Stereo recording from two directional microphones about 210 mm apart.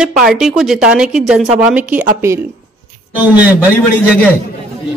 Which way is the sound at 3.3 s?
10° right (ahead or behind).